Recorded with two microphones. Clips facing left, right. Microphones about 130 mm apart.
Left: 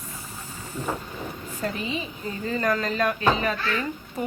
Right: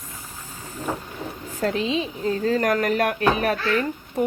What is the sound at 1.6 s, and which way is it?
A woman's voice, 90° right.